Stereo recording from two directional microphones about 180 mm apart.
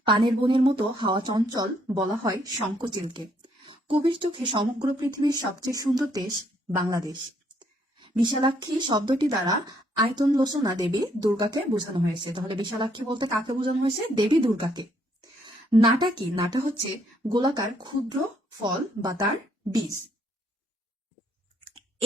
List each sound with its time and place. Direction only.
0.0 s speech: 25° right (ahead or behind)
8.2 s speech: 25° right (ahead or behind)